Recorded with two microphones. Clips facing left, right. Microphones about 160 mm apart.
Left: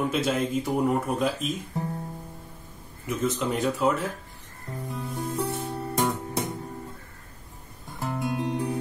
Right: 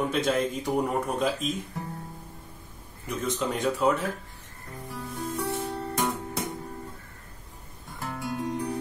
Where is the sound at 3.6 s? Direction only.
Centre (ahead or behind).